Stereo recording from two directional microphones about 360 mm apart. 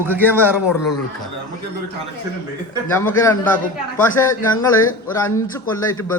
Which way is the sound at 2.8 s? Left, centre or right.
Centre.